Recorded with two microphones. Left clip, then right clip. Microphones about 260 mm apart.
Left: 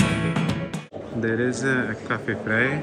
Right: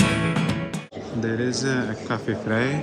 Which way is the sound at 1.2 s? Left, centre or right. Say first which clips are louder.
Left 1 dB; centre.